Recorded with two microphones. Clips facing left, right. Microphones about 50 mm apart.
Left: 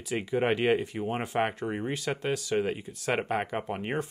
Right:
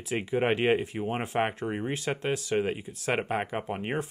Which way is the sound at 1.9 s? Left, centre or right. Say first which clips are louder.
Right 1 dB; right.